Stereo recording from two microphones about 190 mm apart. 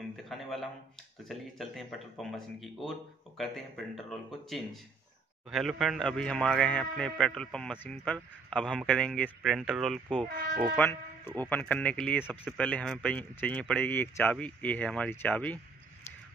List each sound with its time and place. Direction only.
0.1 s a man's voice: centre (ahead or behind)
10.2 s speech: 50° right (ahead or behind)
10.8 s speech: 10° left (ahead or behind)